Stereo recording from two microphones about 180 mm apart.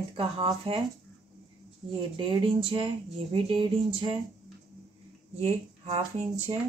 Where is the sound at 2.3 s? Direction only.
25° right (ahead or behind).